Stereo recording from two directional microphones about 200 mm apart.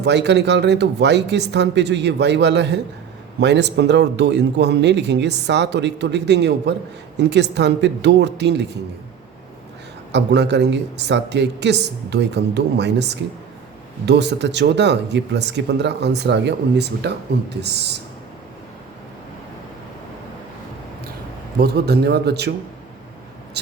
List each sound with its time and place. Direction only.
0.0 s speech: 60° right (ahead or behind)
10.1 s speech: 60° right (ahead or behind)
21.6 s a man's voice: 55° right (ahead or behind)